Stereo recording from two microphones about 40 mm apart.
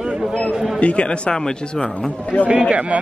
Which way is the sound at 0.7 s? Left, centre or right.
Left.